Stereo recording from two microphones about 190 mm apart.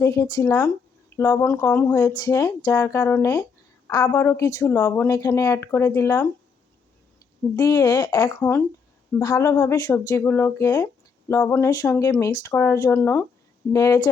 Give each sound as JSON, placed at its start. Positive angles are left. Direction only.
{"t": 0.0, "sound": "speech", "side_deg": 15}
{"t": 7.5, "sound": "speech", "side_deg": 15}